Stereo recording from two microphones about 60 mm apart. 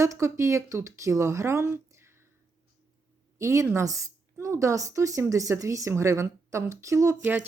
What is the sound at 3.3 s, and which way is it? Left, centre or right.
A woman's voice, right.